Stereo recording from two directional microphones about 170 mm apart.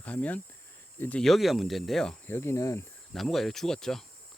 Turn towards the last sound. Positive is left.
turn(degrees=0)  # may be behind; listen again after turning